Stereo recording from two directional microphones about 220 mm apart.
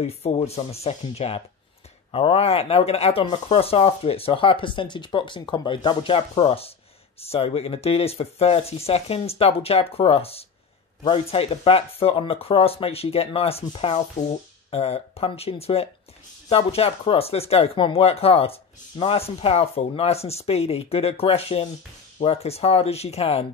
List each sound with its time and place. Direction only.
0.0 s speech: 30° left (ahead or behind)